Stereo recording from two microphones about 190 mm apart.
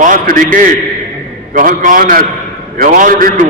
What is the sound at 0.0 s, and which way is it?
A man's voice, 45° right (ahead or behind).